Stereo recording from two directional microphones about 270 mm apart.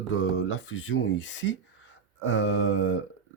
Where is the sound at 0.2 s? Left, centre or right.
Left.